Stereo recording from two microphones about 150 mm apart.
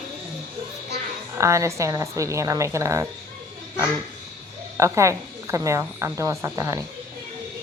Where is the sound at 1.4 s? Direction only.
20° right (ahead or behind).